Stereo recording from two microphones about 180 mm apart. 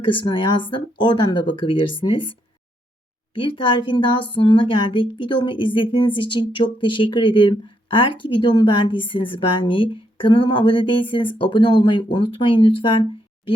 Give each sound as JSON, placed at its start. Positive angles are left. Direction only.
{"t": 0.0, "sound": "speech", "side_deg": 30}
{"t": 3.3, "sound": "speech", "side_deg": 30}